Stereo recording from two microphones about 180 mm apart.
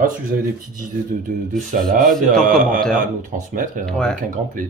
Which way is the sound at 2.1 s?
Centre (ahead or behind).